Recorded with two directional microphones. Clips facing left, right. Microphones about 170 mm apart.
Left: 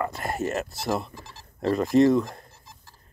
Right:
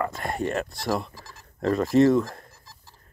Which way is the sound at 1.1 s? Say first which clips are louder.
Left 2 dB; 30° left (ahead or behind).